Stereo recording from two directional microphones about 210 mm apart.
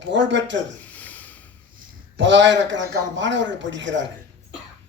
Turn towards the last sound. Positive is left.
turn(degrees=-60)  # may be behind; listen again after turning